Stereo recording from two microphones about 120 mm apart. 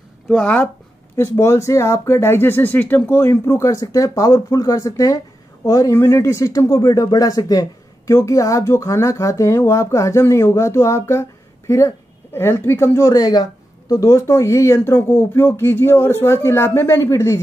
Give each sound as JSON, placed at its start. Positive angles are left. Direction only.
{"t": 0.3, "sound": "speech", "side_deg": 10}
{"t": 1.1, "sound": "speech", "side_deg": 25}